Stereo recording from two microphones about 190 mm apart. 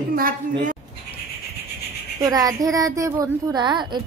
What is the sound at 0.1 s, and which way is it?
Speech, 50° right (ahead or behind).